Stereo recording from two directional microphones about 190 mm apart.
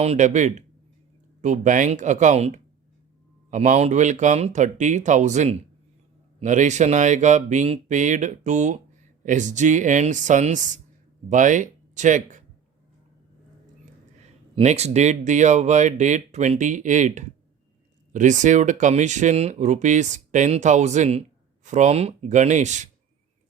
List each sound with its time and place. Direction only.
0.0 s speech: 35° right (ahead or behind)
14.5 s speech: 35° right (ahead or behind)